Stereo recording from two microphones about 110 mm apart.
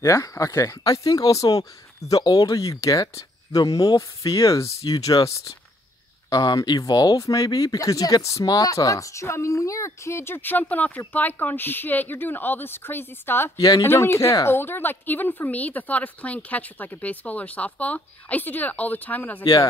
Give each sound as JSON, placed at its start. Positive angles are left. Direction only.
{"t": 0.0, "sound": "speech", "side_deg": 30}
{"t": 6.3, "sound": "a woman's voice", "side_deg": 40}
{"t": 13.6, "sound": "speech", "side_deg": 35}
{"t": 13.8, "sound": "a woman's voice", "side_deg": 25}
{"t": 19.4, "sound": "speech", "side_deg": 35}